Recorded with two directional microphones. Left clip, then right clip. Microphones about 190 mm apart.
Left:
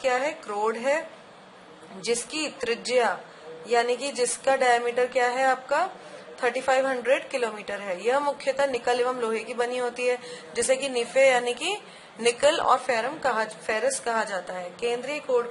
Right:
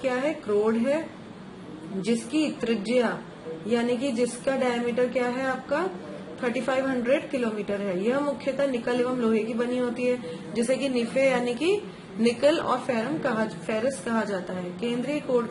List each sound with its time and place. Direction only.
0.0 s a woman's voice: 25° left (ahead or behind)